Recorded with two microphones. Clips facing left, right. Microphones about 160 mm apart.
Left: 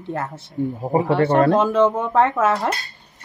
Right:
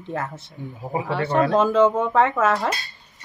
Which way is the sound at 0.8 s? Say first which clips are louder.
Left 6 dB; 45° left (ahead or behind).